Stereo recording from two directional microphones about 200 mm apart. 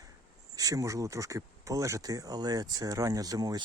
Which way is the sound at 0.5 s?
20° right (ahead or behind).